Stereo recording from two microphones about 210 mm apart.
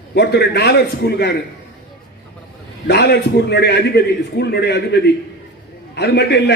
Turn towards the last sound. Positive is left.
turn(degrees=50)  # may be behind; listen again after turning